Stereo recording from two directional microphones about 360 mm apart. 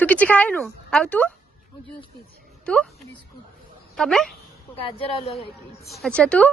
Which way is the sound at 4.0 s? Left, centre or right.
Centre.